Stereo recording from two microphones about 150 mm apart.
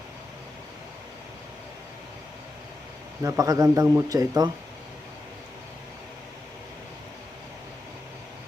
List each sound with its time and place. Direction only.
3.2 s a man's voice: 25° right (ahead or behind)